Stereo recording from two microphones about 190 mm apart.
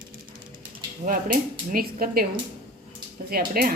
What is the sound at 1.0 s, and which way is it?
Speech, 45° right (ahead or behind).